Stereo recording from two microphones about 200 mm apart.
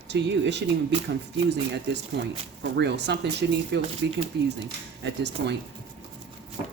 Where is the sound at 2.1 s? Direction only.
55° right (ahead or behind).